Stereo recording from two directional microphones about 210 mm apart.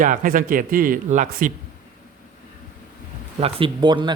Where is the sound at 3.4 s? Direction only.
25° right (ahead or behind).